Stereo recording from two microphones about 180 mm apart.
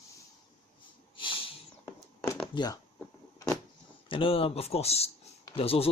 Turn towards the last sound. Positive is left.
turn(degrees=35)  # may be behind; listen again after turning